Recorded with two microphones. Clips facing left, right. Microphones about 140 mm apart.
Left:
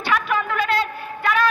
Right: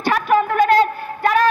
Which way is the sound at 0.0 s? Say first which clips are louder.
Right 6 dB; 45° right (ahead or behind).